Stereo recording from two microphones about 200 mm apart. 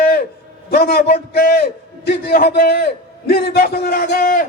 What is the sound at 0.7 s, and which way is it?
A man's voice, 50° left (ahead or behind).